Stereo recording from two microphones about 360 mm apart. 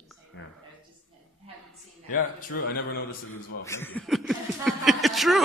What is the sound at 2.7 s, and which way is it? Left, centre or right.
Speech, left.